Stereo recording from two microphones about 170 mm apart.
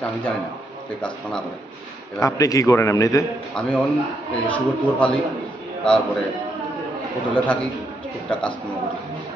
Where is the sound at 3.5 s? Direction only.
10° left (ahead or behind).